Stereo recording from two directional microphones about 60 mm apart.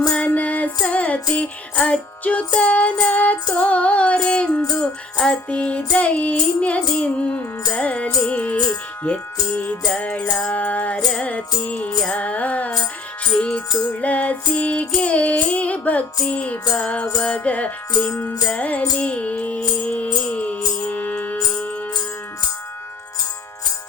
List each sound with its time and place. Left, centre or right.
0.3 s music: left